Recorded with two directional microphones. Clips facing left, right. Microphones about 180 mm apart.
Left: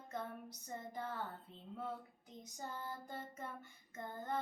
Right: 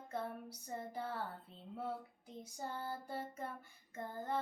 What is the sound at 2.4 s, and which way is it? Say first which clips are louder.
Child singing: right 3 dB; 30° right (ahead or behind).